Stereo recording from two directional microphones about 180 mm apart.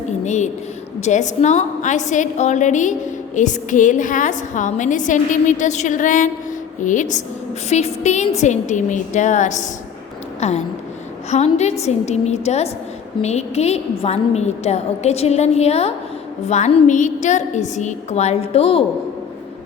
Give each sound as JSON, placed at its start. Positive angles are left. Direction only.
{"t": 0.3, "sound": "a woman's voice", "side_deg": 40}